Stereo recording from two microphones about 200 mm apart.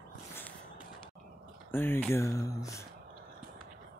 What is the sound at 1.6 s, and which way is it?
Speech, 10° left (ahead or behind).